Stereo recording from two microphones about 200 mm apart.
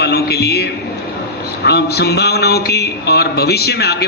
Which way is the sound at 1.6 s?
55° left (ahead or behind).